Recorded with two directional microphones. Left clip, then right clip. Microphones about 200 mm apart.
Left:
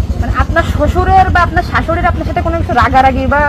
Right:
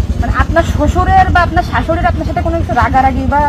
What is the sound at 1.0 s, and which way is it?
Speech, 25° left (ahead or behind).